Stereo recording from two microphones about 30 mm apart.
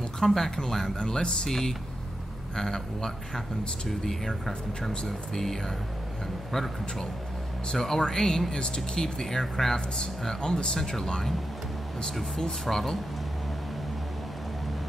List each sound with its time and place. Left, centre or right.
0.2 s speech: centre
9.0 s speech: centre
10.2 s speech: left
12.6 s speech: centre